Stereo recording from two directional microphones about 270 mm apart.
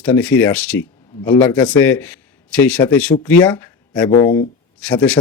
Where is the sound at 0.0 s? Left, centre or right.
Centre.